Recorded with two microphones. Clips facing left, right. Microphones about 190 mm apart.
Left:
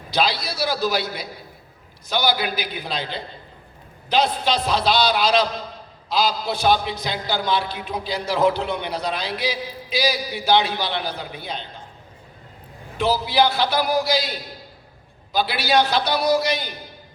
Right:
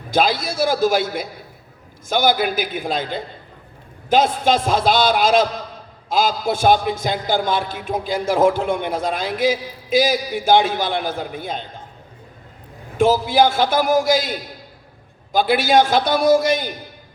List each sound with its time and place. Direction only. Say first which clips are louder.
0.1 s a man's voice: right 4 dB; 50° right (ahead or behind)
13.0 s a man's voice: right 5 dB; 45° right (ahead or behind)